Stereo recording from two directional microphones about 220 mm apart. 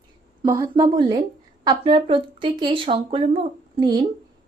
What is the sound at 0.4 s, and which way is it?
Speech, 15° right (ahead or behind).